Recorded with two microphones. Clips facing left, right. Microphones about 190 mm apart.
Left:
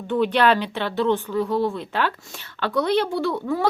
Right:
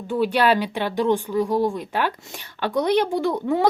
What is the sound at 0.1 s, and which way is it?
Speech, 10° right (ahead or behind).